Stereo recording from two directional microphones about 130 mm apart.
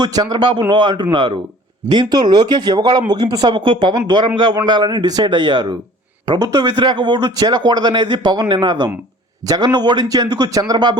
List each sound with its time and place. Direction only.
0.0 s a man's voice: 30° right (ahead or behind)